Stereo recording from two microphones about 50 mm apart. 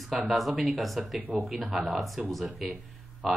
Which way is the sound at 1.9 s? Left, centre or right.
Centre.